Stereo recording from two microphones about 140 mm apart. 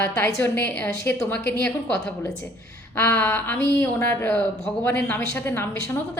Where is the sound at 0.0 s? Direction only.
20° left (ahead or behind).